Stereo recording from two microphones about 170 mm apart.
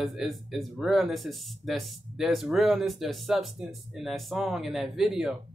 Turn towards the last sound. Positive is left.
turn(degrees=0)  # may be behind; listen again after turning